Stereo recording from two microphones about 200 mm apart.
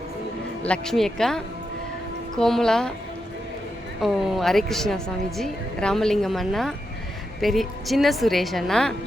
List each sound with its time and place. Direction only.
0.6 s a woman's voice: 5° left (ahead or behind)
4.0 s a woman's voice: centre (ahead or behind)